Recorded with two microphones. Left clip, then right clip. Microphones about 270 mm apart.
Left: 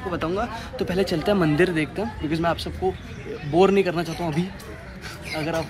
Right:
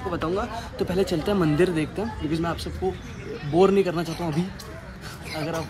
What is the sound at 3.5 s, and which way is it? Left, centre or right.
Speech, centre.